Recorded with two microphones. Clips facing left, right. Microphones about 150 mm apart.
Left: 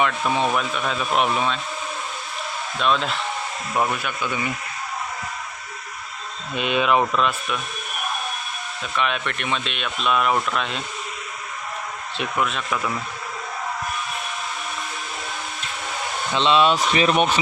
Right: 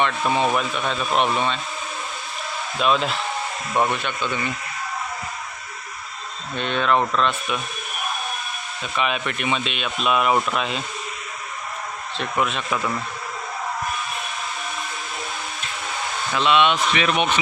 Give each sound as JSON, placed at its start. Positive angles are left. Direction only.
{"t": 0.0, "sound": "speech", "side_deg": 0}
{"t": 2.7, "sound": "speech", "side_deg": -5}
{"t": 6.5, "sound": "speech", "side_deg": 5}
{"t": 8.8, "sound": "speech", "side_deg": 0}
{"t": 12.1, "sound": "speech", "side_deg": 0}
{"t": 16.3, "sound": "speech", "side_deg": 30}